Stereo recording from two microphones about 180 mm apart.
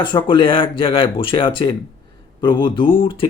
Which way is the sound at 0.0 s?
25° left (ahead or behind).